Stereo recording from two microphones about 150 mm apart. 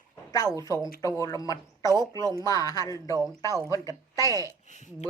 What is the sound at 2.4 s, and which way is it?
A woman's voice, 25° left (ahead or behind).